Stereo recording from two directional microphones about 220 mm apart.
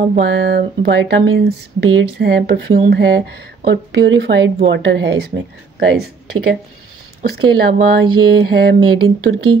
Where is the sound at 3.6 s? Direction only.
50° right (ahead or behind).